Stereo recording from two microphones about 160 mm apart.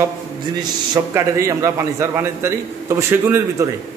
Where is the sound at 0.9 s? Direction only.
20° right (ahead or behind).